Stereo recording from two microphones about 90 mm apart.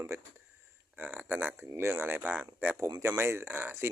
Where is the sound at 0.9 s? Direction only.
20° right (ahead or behind).